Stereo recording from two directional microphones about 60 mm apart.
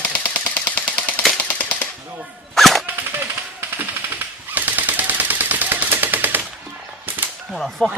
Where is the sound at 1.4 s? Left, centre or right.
Left.